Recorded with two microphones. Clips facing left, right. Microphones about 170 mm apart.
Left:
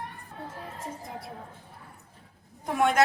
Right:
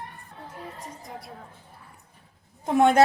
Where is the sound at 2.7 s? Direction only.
30° right (ahead or behind).